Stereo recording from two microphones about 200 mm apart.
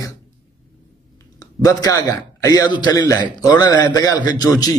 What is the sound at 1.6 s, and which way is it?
A man's voice, 15° left (ahead or behind).